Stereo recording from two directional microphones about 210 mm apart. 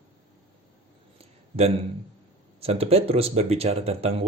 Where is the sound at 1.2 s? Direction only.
30° right (ahead or behind).